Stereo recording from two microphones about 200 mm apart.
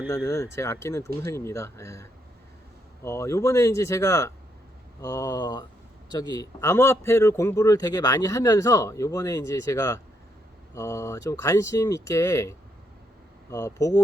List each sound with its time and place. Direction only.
0.3 s a man's voice: 15° left (ahead or behind)